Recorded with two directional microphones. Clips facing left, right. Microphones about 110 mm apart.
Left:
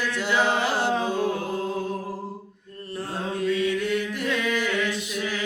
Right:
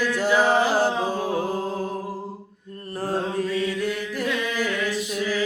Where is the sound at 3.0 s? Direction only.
35° right (ahead or behind).